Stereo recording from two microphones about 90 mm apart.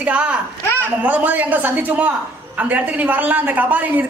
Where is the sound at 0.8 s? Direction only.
20° right (ahead or behind).